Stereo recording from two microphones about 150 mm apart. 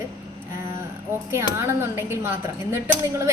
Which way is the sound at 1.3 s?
20° right (ahead or behind).